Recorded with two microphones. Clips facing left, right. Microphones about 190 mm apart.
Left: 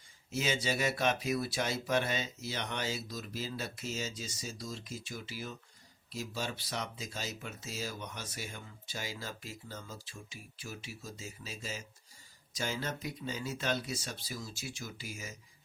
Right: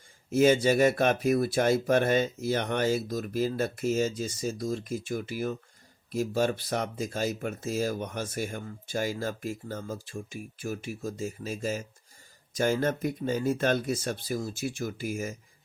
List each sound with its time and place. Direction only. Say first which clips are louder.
0.3 s speech: right 12 dB; 50° right (ahead or behind)